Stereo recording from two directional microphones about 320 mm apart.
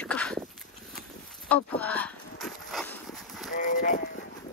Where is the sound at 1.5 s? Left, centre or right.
Centre.